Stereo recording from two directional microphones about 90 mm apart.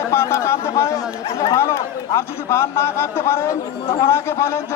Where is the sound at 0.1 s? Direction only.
30° left (ahead or behind).